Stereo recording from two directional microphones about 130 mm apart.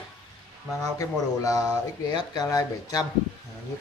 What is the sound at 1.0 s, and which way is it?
Speech, 25° left (ahead or behind).